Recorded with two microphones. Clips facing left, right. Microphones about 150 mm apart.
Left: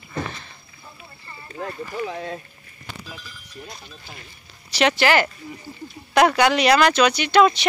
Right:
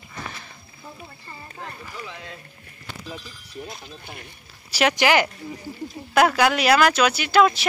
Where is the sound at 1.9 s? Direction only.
45° left (ahead or behind).